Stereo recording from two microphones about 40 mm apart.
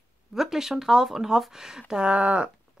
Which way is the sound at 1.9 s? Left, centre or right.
Right.